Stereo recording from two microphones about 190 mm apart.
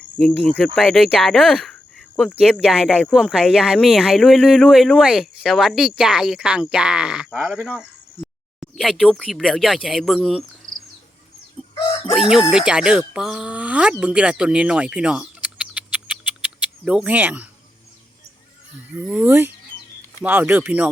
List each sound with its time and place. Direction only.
0.2 s speech: 5° left (ahead or behind)
11.7 s chicken: 25° left (ahead or behind)
12.1 s speech: 5° right (ahead or behind)
19.0 s speech: 10° right (ahead or behind)